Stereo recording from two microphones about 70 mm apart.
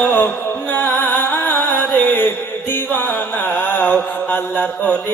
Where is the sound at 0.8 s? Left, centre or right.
Left.